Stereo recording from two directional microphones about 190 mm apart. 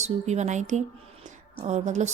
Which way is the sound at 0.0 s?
35° right (ahead or behind).